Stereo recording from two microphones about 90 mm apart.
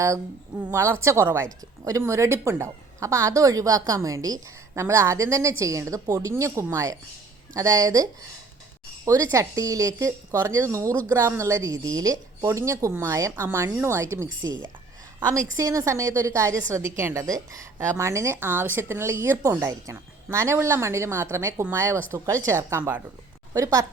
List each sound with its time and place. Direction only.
0.7 s a woman's voice: 30° right (ahead or behind)
9.0 s a woman's voice: 35° right (ahead or behind)
22.8 s speech: 15° right (ahead or behind)
23.6 s a woman's voice: 35° right (ahead or behind)